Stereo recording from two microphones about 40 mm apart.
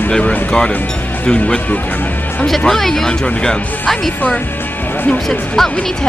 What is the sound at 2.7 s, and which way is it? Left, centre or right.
Speech, centre.